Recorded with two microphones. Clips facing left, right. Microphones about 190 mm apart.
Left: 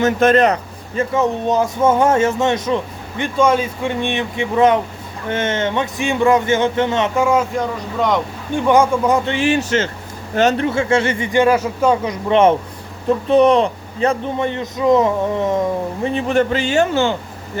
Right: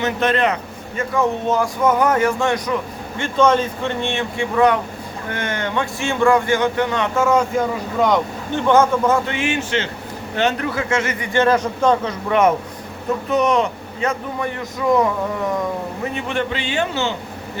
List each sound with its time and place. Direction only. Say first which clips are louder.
0.0 s speech: left 5 dB; 45° left (ahead or behind)
1.1 s speech: left 1 dB; 20° left (ahead or behind)
7.3 s speech: even; 5° left (ahead or behind)
8.5 s speech: left 1 dB; 15° left (ahead or behind)
9.2 s speech: left 5 dB; 30° left (ahead or behind)
10.6 s speech: left 5 dB; 25° left (ahead or behind)
11.3 s speech: left 1 dB; 10° left (ahead or behind)
12.3 s speech: left 3 dB; 25° left (ahead or behind)
16.0 s a man's voice: left 7 dB; 35° left (ahead or behind)